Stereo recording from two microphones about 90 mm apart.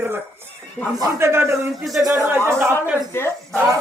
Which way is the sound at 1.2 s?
30° right (ahead or behind).